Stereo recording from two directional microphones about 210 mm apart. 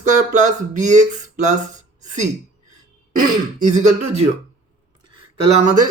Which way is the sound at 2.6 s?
40° right (ahead or behind).